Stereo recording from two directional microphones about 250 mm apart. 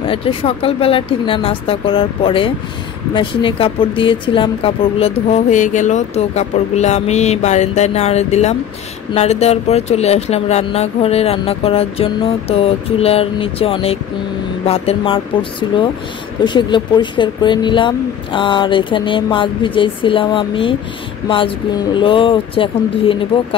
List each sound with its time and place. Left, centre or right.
0.0 s speech: left